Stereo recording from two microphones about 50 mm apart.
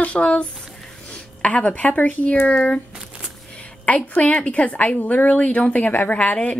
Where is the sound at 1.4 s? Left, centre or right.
Left.